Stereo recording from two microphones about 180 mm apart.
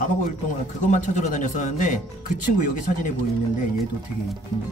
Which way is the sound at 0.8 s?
45° left (ahead or behind).